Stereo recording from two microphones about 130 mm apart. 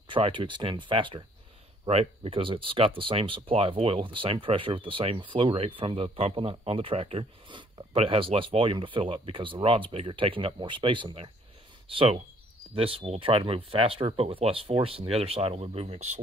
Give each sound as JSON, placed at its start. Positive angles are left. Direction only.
{"t": 0.1, "sound": "speech", "side_deg": -40}
{"t": 12.7, "sound": "speech", "side_deg": -45}